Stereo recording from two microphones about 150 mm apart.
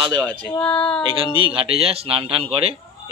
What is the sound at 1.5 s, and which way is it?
Speech, 40° right (ahead or behind).